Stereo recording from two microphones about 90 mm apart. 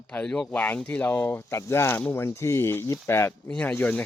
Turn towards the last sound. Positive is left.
turn(degrees=15)  # may be behind; listen again after turning